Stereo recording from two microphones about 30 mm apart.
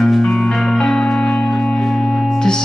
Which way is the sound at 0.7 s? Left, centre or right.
Left.